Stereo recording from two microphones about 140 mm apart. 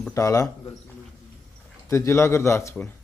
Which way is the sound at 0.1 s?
20° left (ahead or behind).